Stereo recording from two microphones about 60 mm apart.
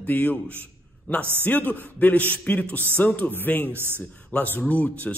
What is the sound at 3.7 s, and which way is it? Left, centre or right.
Speech, right.